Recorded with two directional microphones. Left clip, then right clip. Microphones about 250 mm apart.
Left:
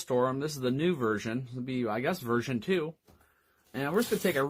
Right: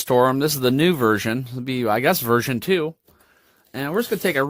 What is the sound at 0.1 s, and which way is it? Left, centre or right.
Speech, right.